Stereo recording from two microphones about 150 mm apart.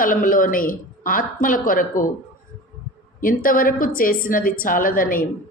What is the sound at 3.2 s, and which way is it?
A woman's voice, 70° left (ahead or behind).